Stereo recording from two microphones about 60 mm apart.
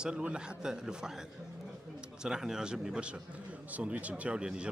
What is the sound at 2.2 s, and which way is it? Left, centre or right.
Speech, centre.